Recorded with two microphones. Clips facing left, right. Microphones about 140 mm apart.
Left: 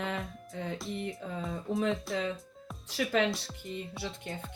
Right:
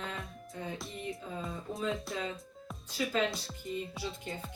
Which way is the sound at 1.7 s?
20° left (ahead or behind).